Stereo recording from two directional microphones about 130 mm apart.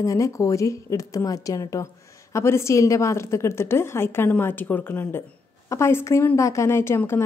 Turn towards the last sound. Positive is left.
turn(degrees=20)  # may be behind; listen again after turning